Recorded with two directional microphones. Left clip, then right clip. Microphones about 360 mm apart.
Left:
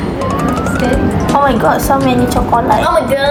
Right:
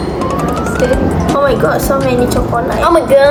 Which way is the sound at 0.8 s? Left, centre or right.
Centre.